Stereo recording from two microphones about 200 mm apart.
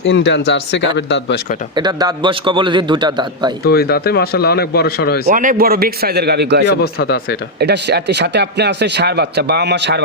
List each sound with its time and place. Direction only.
0.0 s speech: 65° left (ahead or behind)
1.7 s a man's voice: 20° right (ahead or behind)
3.6 s speech: 50° left (ahead or behind)
5.3 s a man's voice: 40° right (ahead or behind); by 6.7 s 55° right (ahead or behind)
6.8 s speech: 50° left (ahead or behind)
7.6 s speech: 55° right (ahead or behind)